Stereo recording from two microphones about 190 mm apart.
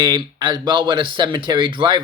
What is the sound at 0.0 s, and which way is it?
Speech, 20° right (ahead or behind).